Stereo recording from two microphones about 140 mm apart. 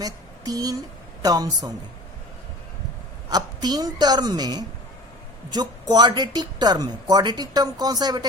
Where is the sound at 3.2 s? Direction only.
30° right (ahead or behind).